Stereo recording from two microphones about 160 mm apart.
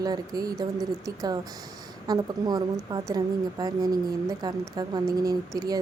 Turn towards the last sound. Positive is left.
turn(degrees=-25)  # may be behind; listen again after turning